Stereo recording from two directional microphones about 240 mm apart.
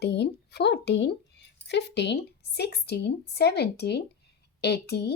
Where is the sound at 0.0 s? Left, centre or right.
Left.